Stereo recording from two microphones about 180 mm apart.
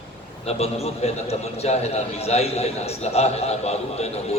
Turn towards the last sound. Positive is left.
turn(degrees=35)  # may be behind; listen again after turning